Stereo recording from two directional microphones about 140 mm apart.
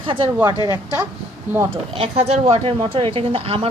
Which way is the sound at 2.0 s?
45° right (ahead or behind).